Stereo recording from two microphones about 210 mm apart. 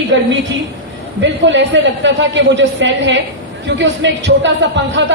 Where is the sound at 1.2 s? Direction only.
60° right (ahead or behind).